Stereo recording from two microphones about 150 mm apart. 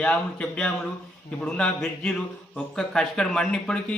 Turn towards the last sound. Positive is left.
turn(degrees=5)  # may be behind; listen again after turning